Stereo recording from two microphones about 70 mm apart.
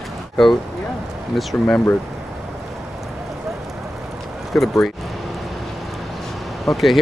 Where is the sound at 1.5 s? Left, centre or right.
Left.